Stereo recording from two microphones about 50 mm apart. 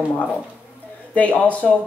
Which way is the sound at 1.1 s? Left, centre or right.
Left.